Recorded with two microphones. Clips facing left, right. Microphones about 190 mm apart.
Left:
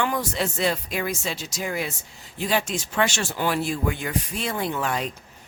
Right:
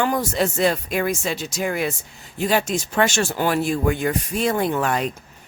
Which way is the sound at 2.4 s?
45° right (ahead or behind).